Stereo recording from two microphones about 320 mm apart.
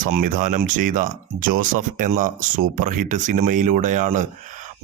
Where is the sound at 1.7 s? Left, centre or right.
Right.